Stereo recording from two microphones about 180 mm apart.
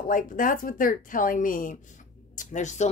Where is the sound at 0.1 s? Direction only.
50° left (ahead or behind).